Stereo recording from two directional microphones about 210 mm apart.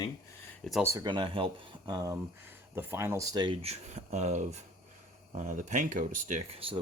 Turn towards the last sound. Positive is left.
turn(degrees=-25)  # may be behind; listen again after turning